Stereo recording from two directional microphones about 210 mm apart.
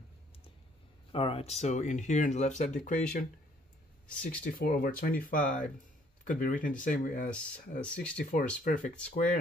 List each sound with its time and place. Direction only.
1.1 s speech: 25° left (ahead or behind)
7.8 s speech: 5° left (ahead or behind)
8.6 s speech: 35° left (ahead or behind)